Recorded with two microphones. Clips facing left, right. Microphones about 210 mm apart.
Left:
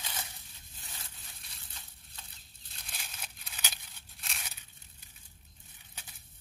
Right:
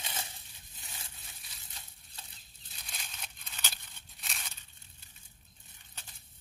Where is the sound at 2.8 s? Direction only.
5° left (ahead or behind).